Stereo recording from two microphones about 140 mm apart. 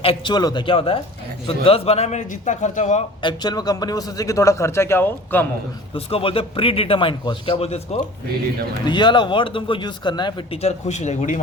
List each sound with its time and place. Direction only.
0.0 s a man's voice: 40° left (ahead or behind); by 3.0 s 55° left (ahead or behind)
3.2 s a man's voice: 30° left (ahead or behind); by 5.5 s 15° left (ahead or behind)
5.9 s a man's voice: 40° left (ahead or behind)
8.9 s a man's voice: 35° left (ahead or behind)
10.6 s speech: 50° left (ahead or behind)